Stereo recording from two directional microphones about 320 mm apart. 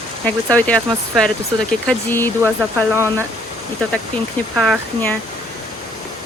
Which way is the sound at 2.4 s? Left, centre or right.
Centre.